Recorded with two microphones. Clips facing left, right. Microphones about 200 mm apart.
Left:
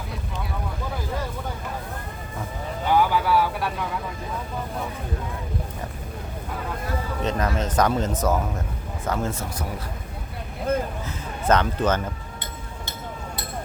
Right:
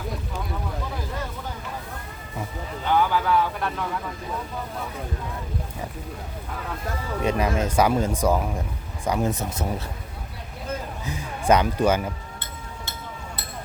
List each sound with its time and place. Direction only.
2.9 s vehicle: 5° left (ahead or behind)
7.2 s speech: 10° right (ahead or behind)
11.0 s speech: 15° right (ahead or behind)